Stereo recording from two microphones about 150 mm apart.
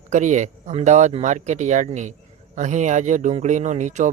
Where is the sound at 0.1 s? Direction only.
55° right (ahead or behind).